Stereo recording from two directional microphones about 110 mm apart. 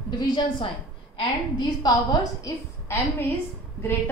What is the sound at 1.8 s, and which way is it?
Speech, 40° left (ahead or behind).